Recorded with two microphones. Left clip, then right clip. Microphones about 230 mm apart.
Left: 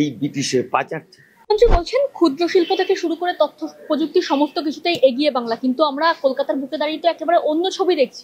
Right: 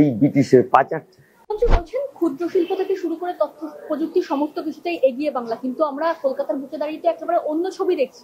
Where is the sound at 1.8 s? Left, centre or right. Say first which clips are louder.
Left 6 dB; left.